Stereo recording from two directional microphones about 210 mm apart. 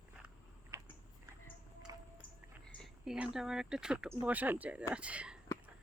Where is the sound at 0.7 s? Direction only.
15° right (ahead or behind).